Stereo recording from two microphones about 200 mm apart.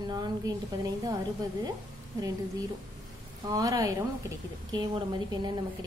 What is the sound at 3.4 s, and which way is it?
A woman's voice, 15° right (ahead or behind).